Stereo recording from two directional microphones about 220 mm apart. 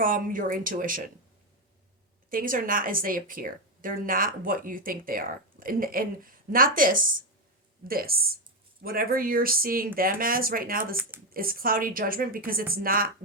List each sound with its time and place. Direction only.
0.0 s a woman's voice: 40° right (ahead or behind)
2.3 s a woman's voice: 40° right (ahead or behind)